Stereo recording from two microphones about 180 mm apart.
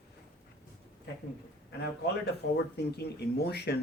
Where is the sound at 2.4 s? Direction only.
65° left (ahead or behind).